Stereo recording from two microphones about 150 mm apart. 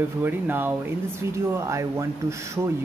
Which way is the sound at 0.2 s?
15° right (ahead or behind).